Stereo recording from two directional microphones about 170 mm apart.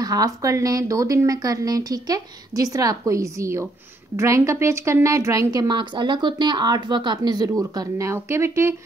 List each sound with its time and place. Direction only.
0.0 s a woman's voice: 20° right (ahead or behind)